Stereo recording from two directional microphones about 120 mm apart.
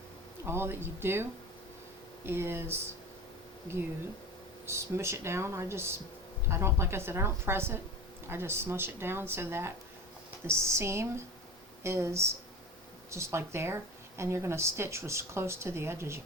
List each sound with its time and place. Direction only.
0.4 s speech: 20° right (ahead or behind)
4.6 s speech: 20° right (ahead or behind)